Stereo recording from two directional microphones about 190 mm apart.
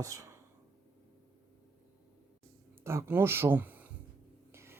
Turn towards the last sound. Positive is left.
turn(degrees=-15)  # may be behind; listen again after turning